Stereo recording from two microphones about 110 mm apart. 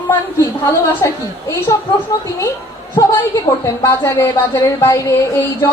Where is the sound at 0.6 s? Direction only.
25° left (ahead or behind).